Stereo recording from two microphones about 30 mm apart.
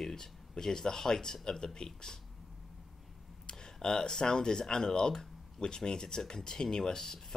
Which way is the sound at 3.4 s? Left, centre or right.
Centre.